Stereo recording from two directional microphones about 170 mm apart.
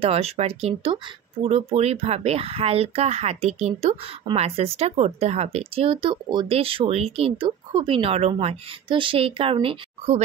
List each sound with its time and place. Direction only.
0.0 s speech: 35° right (ahead or behind)